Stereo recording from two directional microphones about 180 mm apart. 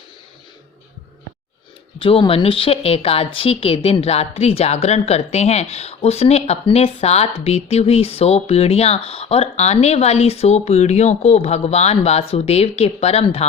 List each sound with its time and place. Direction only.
2.0 s speech: 30° left (ahead or behind)